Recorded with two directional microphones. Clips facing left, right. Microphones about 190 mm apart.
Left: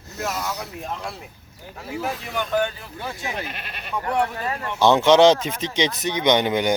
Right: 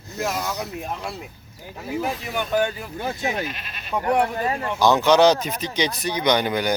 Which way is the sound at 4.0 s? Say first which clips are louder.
Right 3 dB; 20° right (ahead or behind).